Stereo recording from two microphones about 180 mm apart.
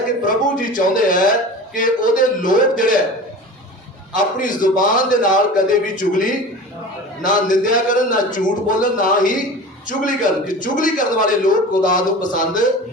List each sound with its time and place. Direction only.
0.2 s a man's voice: 45° left (ahead or behind)
4.1 s a man's voice: 50° left (ahead or behind)
7.3 s a man's voice: 45° left (ahead or behind)